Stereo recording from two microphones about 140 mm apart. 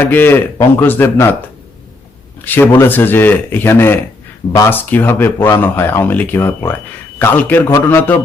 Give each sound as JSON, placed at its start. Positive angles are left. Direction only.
{"t": 0.0, "sound": "speech", "side_deg": 15}